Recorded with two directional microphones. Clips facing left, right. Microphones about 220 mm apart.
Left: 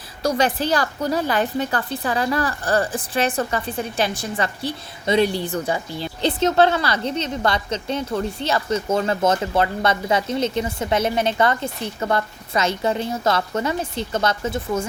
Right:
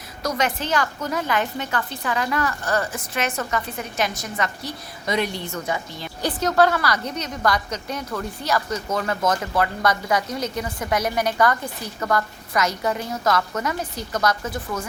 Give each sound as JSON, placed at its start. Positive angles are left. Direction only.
{"t": 0.2, "sound": "a woman's voice", "side_deg": 30}